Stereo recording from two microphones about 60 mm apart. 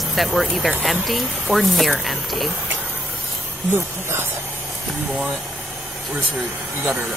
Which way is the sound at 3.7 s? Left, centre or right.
Right.